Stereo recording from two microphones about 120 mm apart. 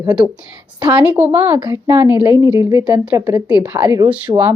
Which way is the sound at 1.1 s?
15° right (ahead or behind).